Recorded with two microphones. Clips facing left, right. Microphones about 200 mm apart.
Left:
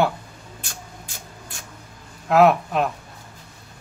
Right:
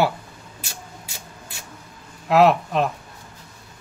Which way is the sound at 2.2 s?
Centre (ahead or behind).